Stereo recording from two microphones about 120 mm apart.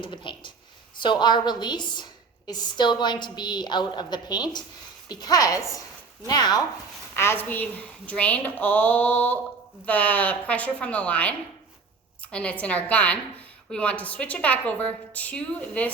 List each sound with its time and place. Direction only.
0.0 s a sound: 40° left (ahead or behind)
0.9 s a woman's voice: 40° left (ahead or behind)
7.2 s a woman's voice: 20° left (ahead or behind)